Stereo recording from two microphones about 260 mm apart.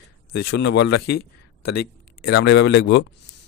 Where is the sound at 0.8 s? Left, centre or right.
Left.